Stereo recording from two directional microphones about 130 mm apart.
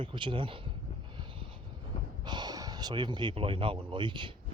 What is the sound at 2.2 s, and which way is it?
Speech, 35° right (ahead or behind).